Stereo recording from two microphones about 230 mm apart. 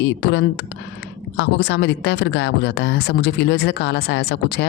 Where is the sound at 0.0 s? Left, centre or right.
Left.